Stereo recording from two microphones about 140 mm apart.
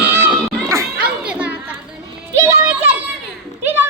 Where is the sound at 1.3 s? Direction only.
10° right (ahead or behind).